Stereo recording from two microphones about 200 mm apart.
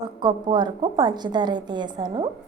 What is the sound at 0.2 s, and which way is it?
A woman's voice, 20° right (ahead or behind).